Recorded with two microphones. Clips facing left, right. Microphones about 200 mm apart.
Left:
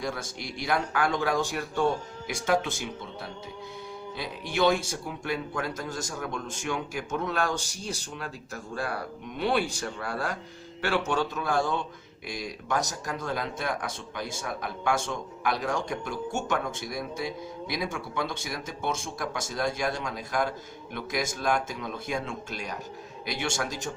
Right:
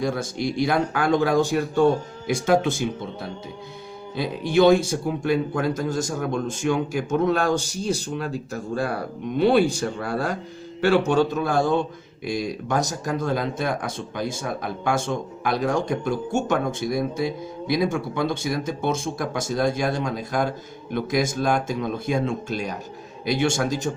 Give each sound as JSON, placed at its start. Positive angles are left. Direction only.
{"t": 0.0, "sound": "speech", "side_deg": -30}
{"t": 4.2, "sound": "speech", "side_deg": -30}
{"t": 9.4, "sound": "speech", "side_deg": -30}